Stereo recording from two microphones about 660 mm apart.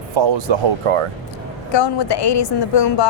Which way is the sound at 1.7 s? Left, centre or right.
Left.